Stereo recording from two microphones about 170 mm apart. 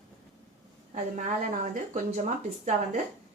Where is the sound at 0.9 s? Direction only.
50° right (ahead or behind).